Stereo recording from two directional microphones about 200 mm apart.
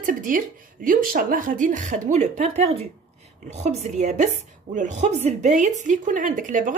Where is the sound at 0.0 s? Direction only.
40° right (ahead or behind).